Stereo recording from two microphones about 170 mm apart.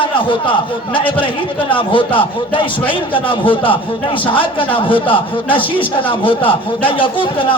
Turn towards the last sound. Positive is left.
turn(degrees=30)  # may be behind; listen again after turning